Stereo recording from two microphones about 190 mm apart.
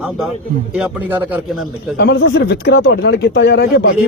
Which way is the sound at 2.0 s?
65° left (ahead or behind).